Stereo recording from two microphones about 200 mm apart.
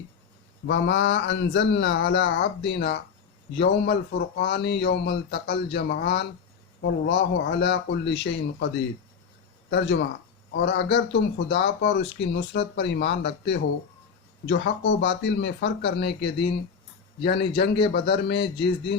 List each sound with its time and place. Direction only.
0.7 s speech: 60° left (ahead or behind)